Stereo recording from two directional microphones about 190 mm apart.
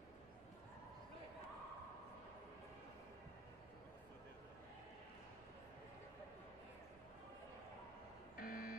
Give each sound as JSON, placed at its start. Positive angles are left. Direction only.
{"t": 8.4, "sound": "buzzer", "side_deg": 50}